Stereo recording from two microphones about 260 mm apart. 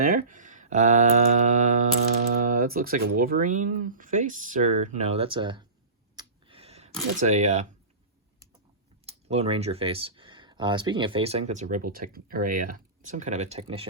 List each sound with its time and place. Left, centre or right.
0.0 s speech: right
6.1 s a sound: centre
7.2 s speech: right
9.0 s speech: right